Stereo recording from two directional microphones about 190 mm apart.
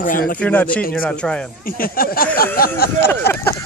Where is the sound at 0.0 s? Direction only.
45° left (ahead or behind).